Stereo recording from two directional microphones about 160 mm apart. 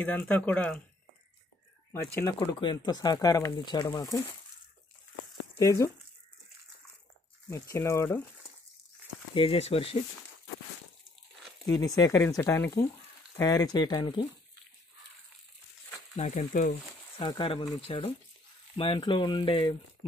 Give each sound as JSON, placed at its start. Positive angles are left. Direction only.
{"t": 0.0, "sound": "speech", "side_deg": 10}
{"t": 1.9, "sound": "speech", "side_deg": 15}
{"t": 5.6, "sound": "speech", "side_deg": 20}
{"t": 7.4, "sound": "speech", "side_deg": 20}
{"t": 9.3, "sound": "speech", "side_deg": 35}
{"t": 11.7, "sound": "speech", "side_deg": 20}
{"t": 16.2, "sound": "frying", "side_deg": 50}
{"t": 17.2, "sound": "speech", "side_deg": 30}